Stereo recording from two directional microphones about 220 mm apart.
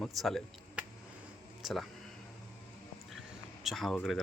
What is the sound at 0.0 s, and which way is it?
Speech, centre (ahead or behind).